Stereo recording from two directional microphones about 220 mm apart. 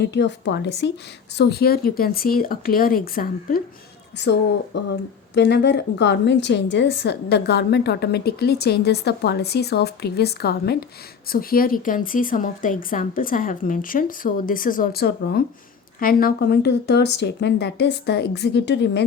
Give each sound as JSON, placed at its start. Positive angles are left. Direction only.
{"t": 0.0, "sound": "a woman's voice", "side_deg": 50}
{"t": 4.2, "sound": "a woman's voice", "side_deg": 50}